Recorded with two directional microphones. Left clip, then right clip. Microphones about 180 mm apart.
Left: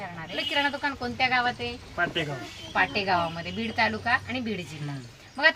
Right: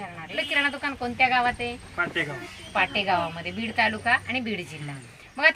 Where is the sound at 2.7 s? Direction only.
15° right (ahead or behind).